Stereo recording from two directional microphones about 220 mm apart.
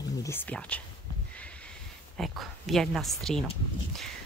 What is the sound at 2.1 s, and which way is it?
A woman's voice, centre (ahead or behind).